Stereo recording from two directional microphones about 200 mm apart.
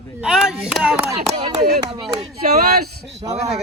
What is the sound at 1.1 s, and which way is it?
Speech, 30° right (ahead or behind).